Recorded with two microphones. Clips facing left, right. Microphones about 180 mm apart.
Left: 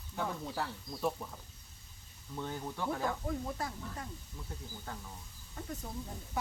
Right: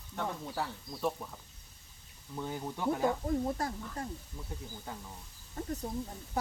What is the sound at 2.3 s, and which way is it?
Speech, 10° right (ahead or behind).